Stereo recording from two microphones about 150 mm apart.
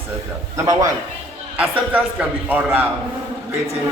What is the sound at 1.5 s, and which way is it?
A man's voice, 10° right (ahead or behind).